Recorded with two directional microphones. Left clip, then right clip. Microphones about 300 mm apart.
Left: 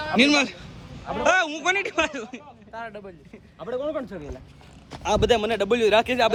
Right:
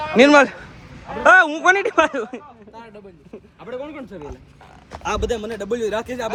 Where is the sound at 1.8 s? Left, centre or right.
Centre.